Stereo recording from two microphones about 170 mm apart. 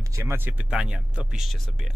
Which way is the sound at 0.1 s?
15° right (ahead or behind).